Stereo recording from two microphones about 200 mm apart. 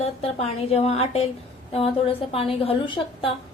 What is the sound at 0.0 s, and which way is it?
A woman's voice, 30° left (ahead or behind).